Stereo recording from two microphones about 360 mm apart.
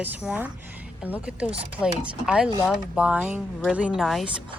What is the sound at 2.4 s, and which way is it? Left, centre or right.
Speech, centre.